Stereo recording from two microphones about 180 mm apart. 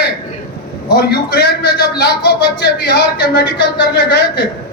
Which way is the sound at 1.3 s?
65° left (ahead or behind).